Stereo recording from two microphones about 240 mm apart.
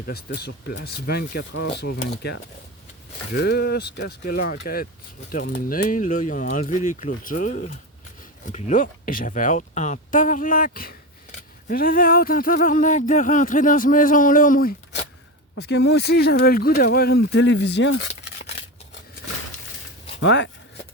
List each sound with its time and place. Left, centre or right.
0.1 s speech: left
20.1 s speech: left